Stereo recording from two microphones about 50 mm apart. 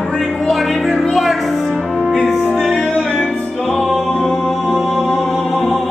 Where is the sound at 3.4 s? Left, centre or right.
Centre.